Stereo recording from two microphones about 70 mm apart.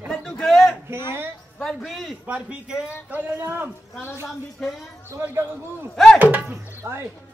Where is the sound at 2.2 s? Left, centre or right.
Centre.